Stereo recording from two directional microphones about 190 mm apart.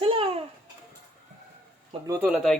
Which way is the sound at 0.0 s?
30° right (ahead or behind).